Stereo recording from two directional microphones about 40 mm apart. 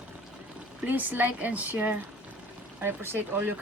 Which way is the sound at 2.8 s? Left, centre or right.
Right.